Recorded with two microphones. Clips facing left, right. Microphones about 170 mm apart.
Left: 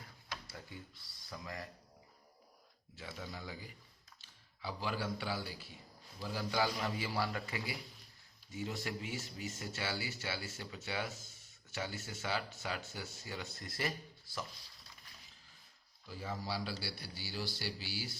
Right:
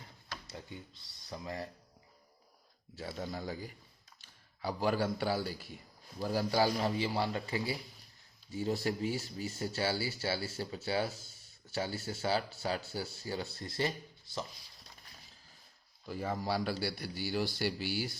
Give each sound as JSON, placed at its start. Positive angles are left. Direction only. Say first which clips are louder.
{"t": 0.4, "sound": "speech", "louder": "right 4 dB", "side_deg": -25}
{"t": 2.9, "sound": "a man's voice", "louder": "right 7 dB", "side_deg": -40}
{"t": 16.0, "sound": "a man's voice", "louder": "right 7 dB", "side_deg": -55}